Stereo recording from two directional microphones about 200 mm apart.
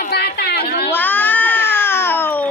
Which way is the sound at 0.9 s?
10° left (ahead or behind).